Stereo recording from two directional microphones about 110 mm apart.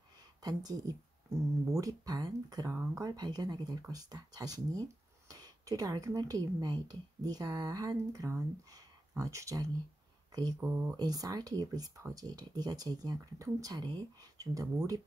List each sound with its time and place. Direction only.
0.4 s speech: 35° right (ahead or behind)
2.7 s speech: 25° right (ahead or behind)